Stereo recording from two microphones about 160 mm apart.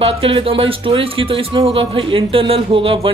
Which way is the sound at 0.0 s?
35° right (ahead or behind).